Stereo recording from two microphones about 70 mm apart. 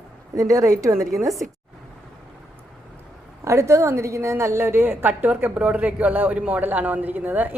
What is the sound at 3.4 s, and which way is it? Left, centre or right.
A woman's voice, right.